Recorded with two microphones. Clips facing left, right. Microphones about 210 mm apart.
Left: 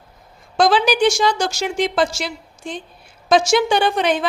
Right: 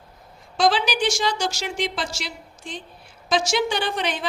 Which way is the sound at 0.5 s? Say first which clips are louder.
Left 5 dB; 50° left (ahead or behind).